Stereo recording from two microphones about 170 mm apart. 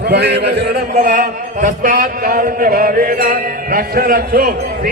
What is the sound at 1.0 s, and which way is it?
A man's voice, 50° right (ahead or behind).